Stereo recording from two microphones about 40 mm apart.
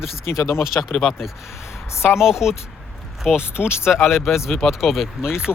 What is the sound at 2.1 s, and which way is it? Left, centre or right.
Speech, centre.